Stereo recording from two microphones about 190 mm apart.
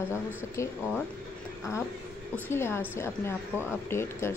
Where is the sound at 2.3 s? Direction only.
15° left (ahead or behind).